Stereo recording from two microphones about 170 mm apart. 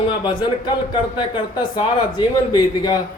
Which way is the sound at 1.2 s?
25° left (ahead or behind).